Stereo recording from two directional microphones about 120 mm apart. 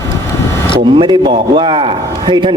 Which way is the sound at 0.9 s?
40° right (ahead or behind).